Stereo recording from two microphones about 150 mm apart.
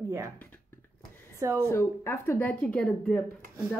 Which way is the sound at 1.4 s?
20° right (ahead or behind).